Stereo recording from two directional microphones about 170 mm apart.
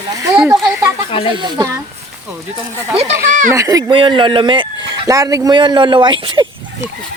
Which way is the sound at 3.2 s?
50° right (ahead or behind).